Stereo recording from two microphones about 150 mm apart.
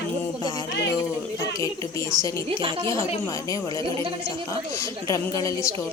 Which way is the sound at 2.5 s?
35° right (ahead or behind).